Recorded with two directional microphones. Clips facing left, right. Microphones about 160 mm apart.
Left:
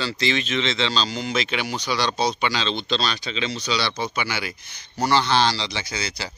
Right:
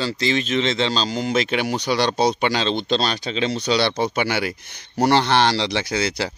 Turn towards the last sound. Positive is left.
turn(degrees=-65)  # may be behind; listen again after turning